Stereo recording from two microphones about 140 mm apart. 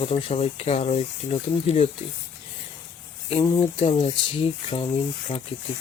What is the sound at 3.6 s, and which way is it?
Speech, 40° left (ahead or behind).